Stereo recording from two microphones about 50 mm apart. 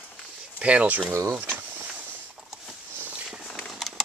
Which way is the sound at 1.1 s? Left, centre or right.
Right.